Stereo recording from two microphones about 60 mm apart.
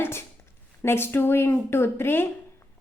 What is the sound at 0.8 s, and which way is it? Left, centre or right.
A woman's voice, left.